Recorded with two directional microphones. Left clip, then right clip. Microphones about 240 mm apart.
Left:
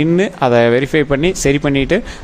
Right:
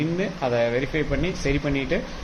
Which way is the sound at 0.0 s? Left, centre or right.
Left.